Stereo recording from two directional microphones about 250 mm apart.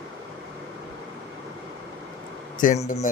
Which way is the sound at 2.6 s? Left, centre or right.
Left.